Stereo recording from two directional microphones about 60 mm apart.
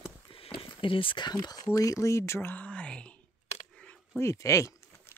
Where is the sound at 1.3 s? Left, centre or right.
Left.